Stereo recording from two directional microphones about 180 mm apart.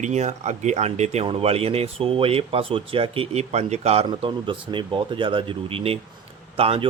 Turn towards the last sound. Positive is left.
turn(degrees=-30)  # may be behind; listen again after turning